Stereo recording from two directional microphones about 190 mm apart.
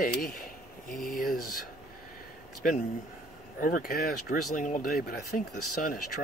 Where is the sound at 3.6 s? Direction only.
50° left (ahead or behind).